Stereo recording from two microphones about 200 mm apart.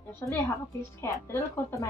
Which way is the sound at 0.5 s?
15° left (ahead or behind).